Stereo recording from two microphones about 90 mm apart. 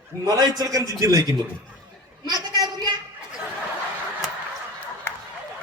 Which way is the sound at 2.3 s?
50° right (ahead or behind).